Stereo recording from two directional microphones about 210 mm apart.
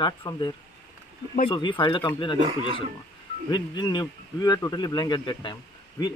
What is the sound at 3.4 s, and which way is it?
Speech, 20° left (ahead or behind).